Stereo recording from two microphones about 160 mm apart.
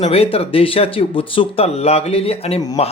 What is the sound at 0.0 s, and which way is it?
Speech, 35° left (ahead or behind).